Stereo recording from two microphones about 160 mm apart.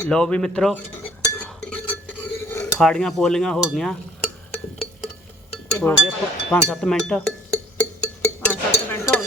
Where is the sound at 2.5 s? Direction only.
20° left (ahead or behind).